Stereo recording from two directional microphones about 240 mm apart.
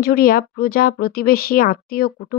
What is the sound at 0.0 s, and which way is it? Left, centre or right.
Speech, left.